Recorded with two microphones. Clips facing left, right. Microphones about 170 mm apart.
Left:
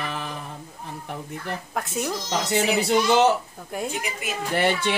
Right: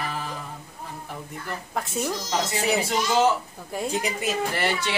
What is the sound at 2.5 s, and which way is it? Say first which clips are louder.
Speech: left 6 dB; 75° left (ahead or behind).